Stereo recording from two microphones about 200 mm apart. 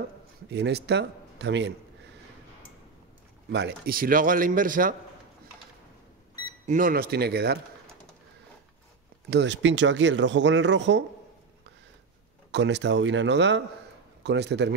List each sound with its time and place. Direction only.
0.5 s speech: 55° right (ahead or behind)
3.5 s speech: 55° right (ahead or behind)
6.6 s speech: 40° right (ahead or behind)
9.3 s speech: 60° right (ahead or behind)
12.4 s speech: 60° right (ahead or behind)